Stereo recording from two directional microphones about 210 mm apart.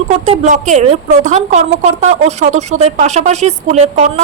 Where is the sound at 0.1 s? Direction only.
35° right (ahead or behind).